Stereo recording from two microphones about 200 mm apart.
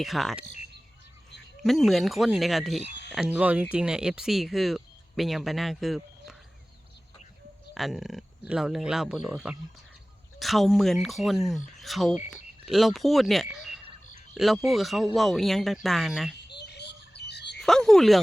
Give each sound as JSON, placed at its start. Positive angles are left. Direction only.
{"t": 0.0, "sound": "speech", "side_deg": 0}
{"t": 1.6, "sound": "speech", "side_deg": 0}
{"t": 7.7, "sound": "speech", "side_deg": 0}
{"t": 16.5, "sound": "bird", "side_deg": 55}
{"t": 17.6, "sound": "speech", "side_deg": 0}